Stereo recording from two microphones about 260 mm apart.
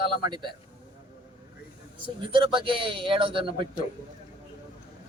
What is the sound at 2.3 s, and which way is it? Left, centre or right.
Speech, centre.